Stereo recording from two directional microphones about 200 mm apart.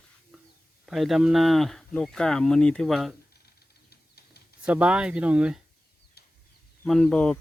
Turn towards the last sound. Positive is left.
turn(degrees=5)  # may be behind; listen again after turning